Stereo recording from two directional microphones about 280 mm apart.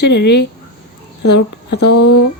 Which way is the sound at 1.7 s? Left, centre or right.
Left.